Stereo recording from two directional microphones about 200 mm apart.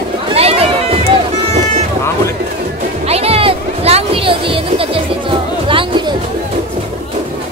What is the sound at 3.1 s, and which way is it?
Music, 30° right (ahead or behind).